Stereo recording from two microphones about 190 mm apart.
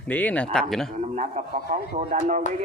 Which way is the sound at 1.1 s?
40° right (ahead or behind).